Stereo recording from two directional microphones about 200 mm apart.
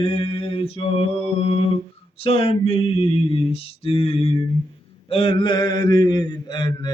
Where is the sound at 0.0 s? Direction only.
25° left (ahead or behind).